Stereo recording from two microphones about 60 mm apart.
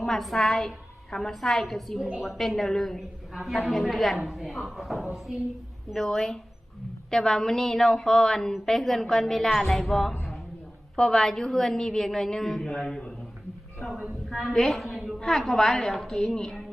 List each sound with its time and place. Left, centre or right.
0.0 s a woman's voice: centre